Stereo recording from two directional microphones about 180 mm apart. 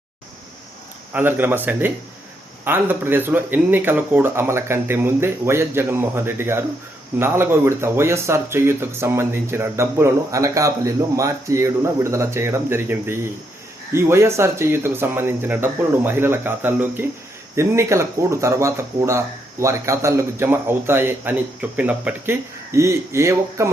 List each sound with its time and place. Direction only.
1.1 s speech: 10° right (ahead or behind)